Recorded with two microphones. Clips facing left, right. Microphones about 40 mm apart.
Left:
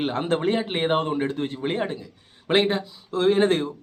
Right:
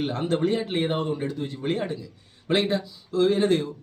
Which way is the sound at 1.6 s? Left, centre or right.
Left.